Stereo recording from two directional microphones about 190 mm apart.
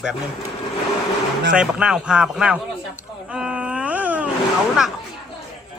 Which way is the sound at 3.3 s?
5° right (ahead or behind).